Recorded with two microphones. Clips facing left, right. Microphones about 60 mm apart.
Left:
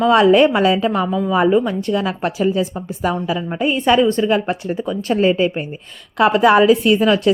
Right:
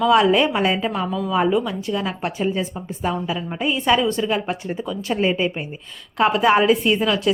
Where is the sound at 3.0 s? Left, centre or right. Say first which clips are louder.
Left 4 dB; left.